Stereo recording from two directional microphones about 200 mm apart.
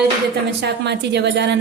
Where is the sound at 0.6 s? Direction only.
60° right (ahead or behind).